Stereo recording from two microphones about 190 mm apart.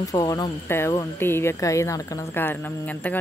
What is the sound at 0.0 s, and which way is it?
Speech, 20° left (ahead or behind).